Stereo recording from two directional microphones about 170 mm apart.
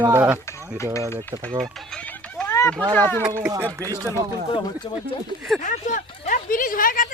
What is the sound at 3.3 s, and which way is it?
Speech, 20° right (ahead or behind).